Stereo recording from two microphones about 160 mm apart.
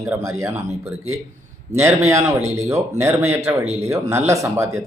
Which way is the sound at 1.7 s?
15° right (ahead or behind).